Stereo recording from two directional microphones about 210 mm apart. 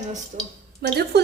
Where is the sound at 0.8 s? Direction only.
50° right (ahead or behind).